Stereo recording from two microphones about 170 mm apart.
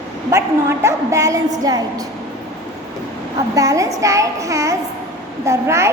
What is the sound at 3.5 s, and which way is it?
A child's voice, 20° right (ahead or behind).